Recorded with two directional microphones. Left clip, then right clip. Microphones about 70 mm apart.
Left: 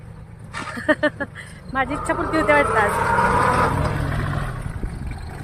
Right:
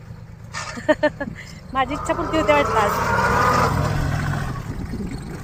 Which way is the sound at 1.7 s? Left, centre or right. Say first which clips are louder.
Right 1 dB; left.